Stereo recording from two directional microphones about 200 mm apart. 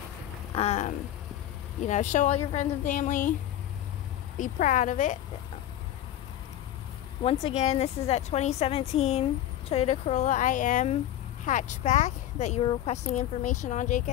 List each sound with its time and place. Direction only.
0.6 s speech: 35° left (ahead or behind)
4.4 s speech: 40° left (ahead or behind)
7.2 s speech: 30° left (ahead or behind)